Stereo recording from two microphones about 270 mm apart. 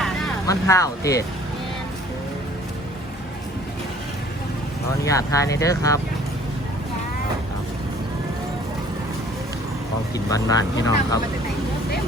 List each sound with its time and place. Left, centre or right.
0.4 s speech: centre
5.0 s speech: centre
10.2 s speech: centre